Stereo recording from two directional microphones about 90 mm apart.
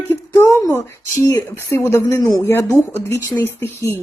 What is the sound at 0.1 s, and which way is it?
Speech, 30° left (ahead or behind).